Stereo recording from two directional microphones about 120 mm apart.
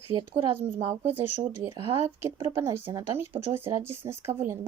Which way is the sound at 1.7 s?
45° right (ahead or behind).